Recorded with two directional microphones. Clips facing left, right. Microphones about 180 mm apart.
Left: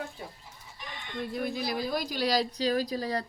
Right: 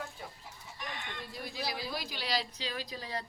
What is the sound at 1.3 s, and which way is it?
A woman's voice, 55° left (ahead or behind).